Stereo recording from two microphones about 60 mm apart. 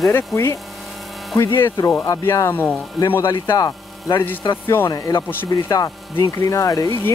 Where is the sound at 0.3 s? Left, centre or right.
Left.